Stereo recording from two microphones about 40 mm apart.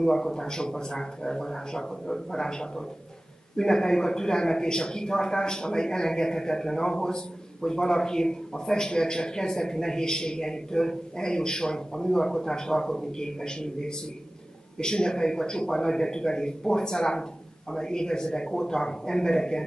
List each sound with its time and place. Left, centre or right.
0.0 s a man's voice: centre